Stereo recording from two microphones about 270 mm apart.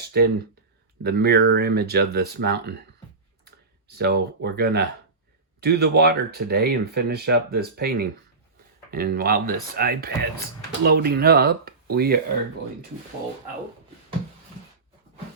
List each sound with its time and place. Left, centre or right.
0.1 s speech: right